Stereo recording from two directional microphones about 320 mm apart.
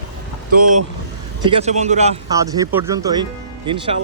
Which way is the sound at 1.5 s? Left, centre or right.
Centre.